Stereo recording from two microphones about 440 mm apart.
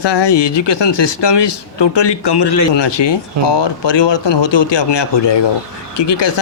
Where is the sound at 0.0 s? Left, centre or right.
Left.